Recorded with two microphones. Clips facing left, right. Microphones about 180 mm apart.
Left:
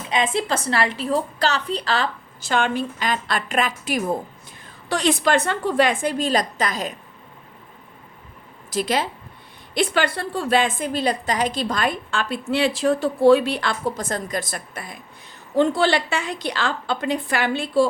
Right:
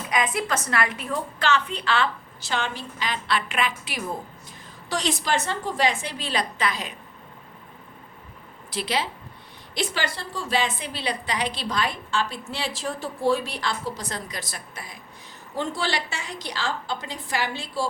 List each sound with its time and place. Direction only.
0.1 s a woman's voice: 25° left (ahead or behind); by 4.0 s 45° left (ahead or behind)
4.9 s a woman's voice: 60° left (ahead or behind); by 6.9 s 45° left (ahead or behind)
8.7 s a woman's voice: 45° left (ahead or behind)